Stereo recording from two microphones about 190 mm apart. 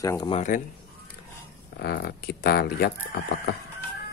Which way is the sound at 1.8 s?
55° left (ahead or behind).